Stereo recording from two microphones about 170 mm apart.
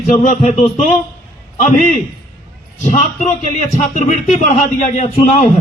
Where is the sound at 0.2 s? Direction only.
45° left (ahead or behind).